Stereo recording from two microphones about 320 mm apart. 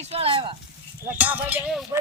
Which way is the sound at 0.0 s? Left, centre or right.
Centre.